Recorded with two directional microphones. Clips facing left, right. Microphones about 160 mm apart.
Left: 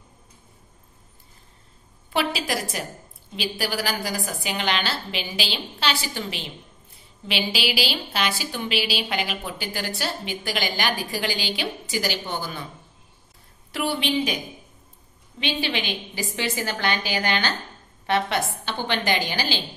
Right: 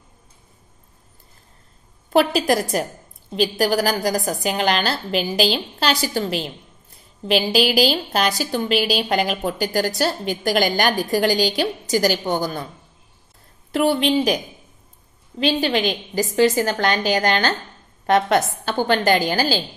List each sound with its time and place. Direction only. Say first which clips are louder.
2.0 s a woman's voice: right 9 dB; 45° right (ahead or behind)
13.7 s a woman's voice: right 7 dB; 40° right (ahead or behind)